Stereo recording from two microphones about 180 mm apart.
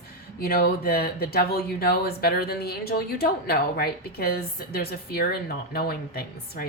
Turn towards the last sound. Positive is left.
turn(degrees=60)  # may be behind; listen again after turning